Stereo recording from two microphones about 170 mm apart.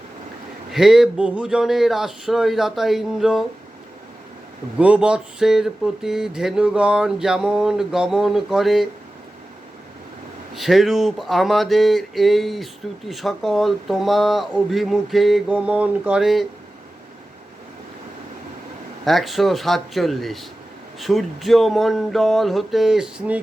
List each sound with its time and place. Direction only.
0.7 s speech: centre (ahead or behind)
4.8 s speech: 5° right (ahead or behind)
10.5 s speech: centre (ahead or behind)
19.0 s speech: centre (ahead or behind)